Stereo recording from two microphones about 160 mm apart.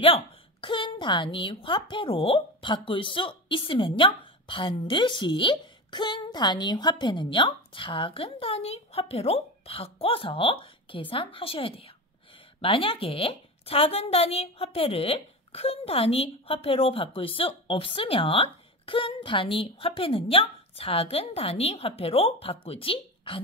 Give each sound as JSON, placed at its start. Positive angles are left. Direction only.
{"t": 0.0, "sound": "a woman's voice", "side_deg": 35}